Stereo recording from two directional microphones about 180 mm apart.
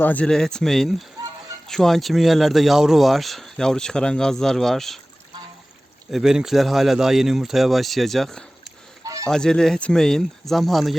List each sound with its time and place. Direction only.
0.0 s speech: 10° left (ahead or behind)
6.1 s speech: centre (ahead or behind)
9.0 s honk: 20° right (ahead or behind)
9.3 s speech: 5° left (ahead or behind)